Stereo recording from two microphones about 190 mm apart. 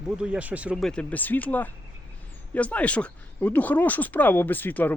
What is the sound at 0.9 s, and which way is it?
Speech, 5° left (ahead or behind).